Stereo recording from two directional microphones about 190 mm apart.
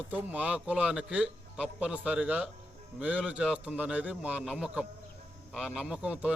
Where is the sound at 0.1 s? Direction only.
10° right (ahead or behind).